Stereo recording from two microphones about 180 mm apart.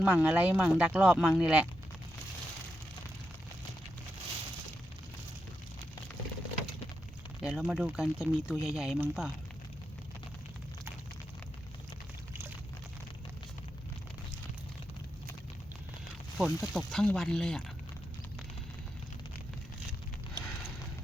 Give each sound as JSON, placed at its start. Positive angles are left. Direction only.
{"t": 0.0, "sound": "speech", "side_deg": -5}
{"t": 7.4, "sound": "speech", "side_deg": -5}
{"t": 16.4, "sound": "speech", "side_deg": 0}
{"t": 20.4, "sound": "clip-clop", "side_deg": -20}